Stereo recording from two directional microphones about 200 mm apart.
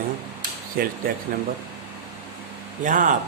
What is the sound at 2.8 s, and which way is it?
Speech, 40° right (ahead or behind).